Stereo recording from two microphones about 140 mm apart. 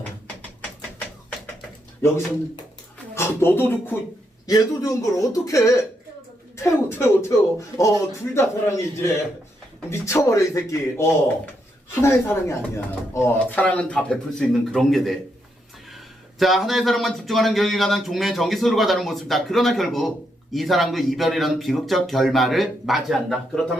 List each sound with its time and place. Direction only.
2.0 s speech: 15° left (ahead or behind)
4.4 s speech: 25° left (ahead or behind); by 23.7 s centre (ahead or behind)